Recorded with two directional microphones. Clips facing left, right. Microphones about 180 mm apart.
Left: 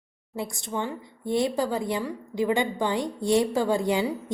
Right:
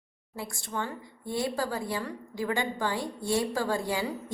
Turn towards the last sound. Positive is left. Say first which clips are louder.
# left 6 dB
turn(degrees=20)  # may be behind; listen again after turning